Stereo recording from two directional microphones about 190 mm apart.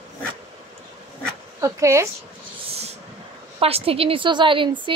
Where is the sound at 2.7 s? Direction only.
35° right (ahead or behind).